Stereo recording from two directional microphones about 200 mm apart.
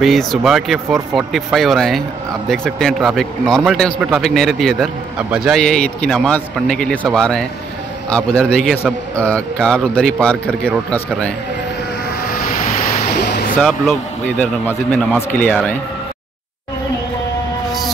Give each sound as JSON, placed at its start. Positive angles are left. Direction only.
{"t": 0.0, "sound": "speech", "side_deg": 0}
{"t": 12.2, "sound": "vehicle", "side_deg": 50}
{"t": 13.1, "sound": "a sound", "side_deg": 55}
{"t": 13.6, "sound": "a man's voice", "side_deg": 0}